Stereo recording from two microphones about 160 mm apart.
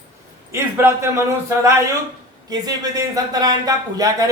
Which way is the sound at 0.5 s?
15° right (ahead or behind).